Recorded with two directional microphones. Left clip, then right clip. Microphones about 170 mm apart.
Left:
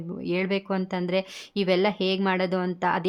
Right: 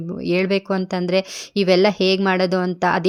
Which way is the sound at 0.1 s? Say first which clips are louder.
Right 7 dB; 30° right (ahead or behind).